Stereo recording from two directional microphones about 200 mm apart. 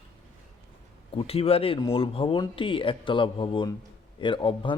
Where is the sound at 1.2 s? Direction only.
30° left (ahead or behind).